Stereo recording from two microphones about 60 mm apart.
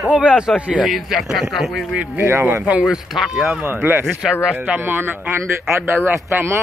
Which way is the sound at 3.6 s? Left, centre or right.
Right.